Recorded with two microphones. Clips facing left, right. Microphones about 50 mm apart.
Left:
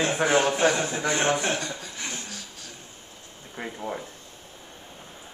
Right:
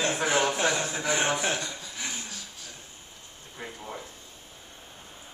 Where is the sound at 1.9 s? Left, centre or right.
Centre.